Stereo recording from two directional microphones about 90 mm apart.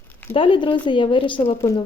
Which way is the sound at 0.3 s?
70° left (ahead or behind).